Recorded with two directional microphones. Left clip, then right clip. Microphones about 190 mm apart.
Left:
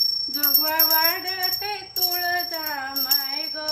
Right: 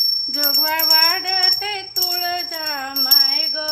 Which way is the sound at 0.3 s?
20° right (ahead or behind).